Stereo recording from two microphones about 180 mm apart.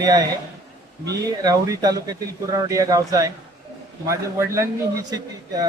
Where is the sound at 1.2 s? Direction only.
20° right (ahead or behind).